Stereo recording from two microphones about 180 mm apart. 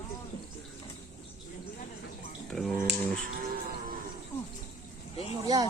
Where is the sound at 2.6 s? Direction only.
Centre (ahead or behind).